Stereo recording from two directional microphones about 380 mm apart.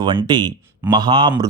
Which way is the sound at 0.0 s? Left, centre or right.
Centre.